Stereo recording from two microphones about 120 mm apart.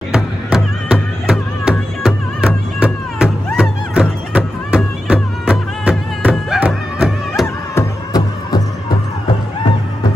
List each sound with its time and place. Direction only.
0.1 s music: 5° right (ahead or behind)
7.4 s music: 20° left (ahead or behind)